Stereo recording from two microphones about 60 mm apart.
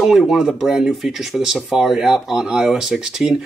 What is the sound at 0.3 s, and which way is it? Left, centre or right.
Speech, centre.